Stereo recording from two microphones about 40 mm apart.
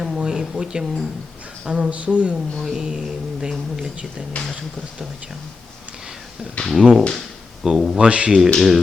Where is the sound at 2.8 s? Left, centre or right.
Right.